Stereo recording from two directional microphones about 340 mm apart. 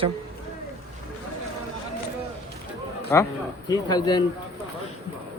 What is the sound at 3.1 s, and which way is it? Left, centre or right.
A man's voice, centre.